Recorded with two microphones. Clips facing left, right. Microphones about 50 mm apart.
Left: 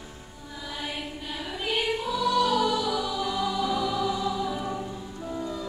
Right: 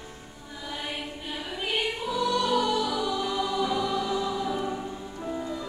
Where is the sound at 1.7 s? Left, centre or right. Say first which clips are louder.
Left 1 dB; centre.